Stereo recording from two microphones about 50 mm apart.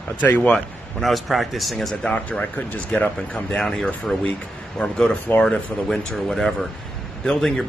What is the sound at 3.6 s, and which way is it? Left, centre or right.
Speech, centre.